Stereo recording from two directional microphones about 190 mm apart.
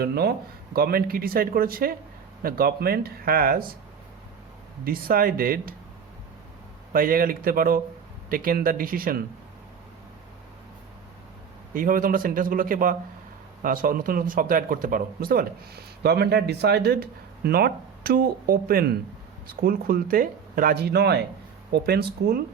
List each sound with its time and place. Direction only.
0.0 s speech: 55° right (ahead or behind)
4.9 s speech: 50° right (ahead or behind)
6.9 s speech: 50° right (ahead or behind)
11.7 s speech: 45° right (ahead or behind)